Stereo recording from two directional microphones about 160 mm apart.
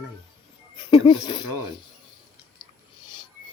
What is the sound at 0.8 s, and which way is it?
Speech, 30° left (ahead or behind).